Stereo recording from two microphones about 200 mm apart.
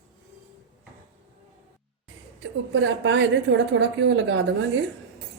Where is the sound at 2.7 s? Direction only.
65° right (ahead or behind).